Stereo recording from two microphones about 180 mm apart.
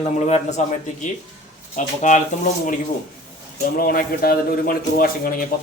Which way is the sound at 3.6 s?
55° left (ahead or behind).